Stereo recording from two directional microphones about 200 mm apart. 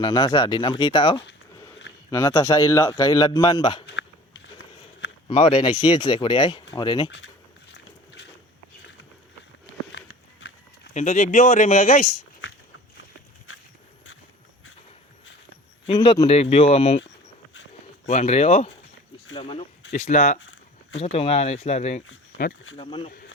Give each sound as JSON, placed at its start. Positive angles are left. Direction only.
{"t": 0.0, "sound": "a man's voice", "side_deg": 20}
{"t": 5.3, "sound": "a man's voice", "side_deg": 30}
{"t": 7.7, "sound": "a sound", "side_deg": 60}
{"t": 9.9, "sound": "a sound", "side_deg": 65}
{"t": 10.9, "sound": "speech", "side_deg": 40}
{"t": 15.9, "sound": "a man's voice", "side_deg": 20}
{"t": 16.2, "sound": "speech", "side_deg": 30}
{"t": 18.0, "sound": "a man's voice", "side_deg": 35}